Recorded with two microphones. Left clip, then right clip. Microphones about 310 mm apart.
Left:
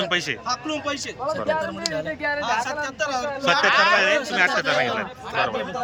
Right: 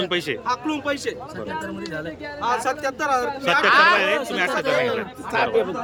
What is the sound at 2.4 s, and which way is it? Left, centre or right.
Speech, centre.